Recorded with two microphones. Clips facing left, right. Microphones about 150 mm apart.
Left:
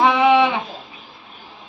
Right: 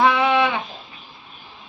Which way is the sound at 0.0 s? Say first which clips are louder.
Left 3 dB; 20° left (ahead or behind).